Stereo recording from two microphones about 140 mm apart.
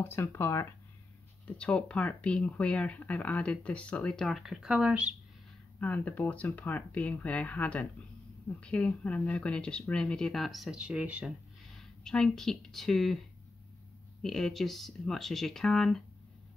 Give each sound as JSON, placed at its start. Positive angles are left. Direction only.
{"t": 0.0, "sound": "speech", "side_deg": 20}
{"t": 1.6, "sound": "speech", "side_deg": 5}
{"t": 5.8, "sound": "speech", "side_deg": 10}
{"t": 12.0, "sound": "speech", "side_deg": 5}
{"t": 14.2, "sound": "speech", "side_deg": 5}